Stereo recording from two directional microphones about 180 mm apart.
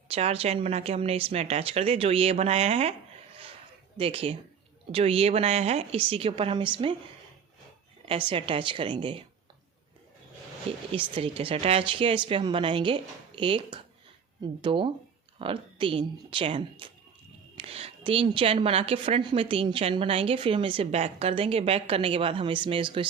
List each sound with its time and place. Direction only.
0.1 s a woman's voice: 35° right (ahead or behind)
3.9 s a woman's voice: 30° right (ahead or behind)
8.3 s speech: 30° right (ahead or behind)
10.9 s a woman's voice: 30° right (ahead or behind)